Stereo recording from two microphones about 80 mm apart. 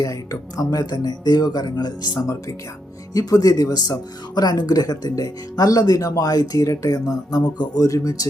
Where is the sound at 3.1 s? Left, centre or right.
Left.